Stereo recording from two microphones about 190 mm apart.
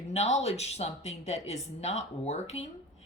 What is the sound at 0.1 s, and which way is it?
A woman's voice, 35° left (ahead or behind).